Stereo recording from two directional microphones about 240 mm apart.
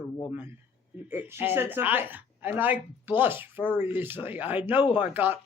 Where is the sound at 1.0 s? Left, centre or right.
Centre.